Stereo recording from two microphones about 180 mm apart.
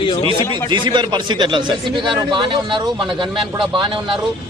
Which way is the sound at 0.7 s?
25° right (ahead or behind).